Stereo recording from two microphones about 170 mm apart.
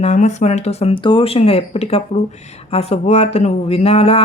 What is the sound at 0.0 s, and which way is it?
Speech, 45° left (ahead or behind).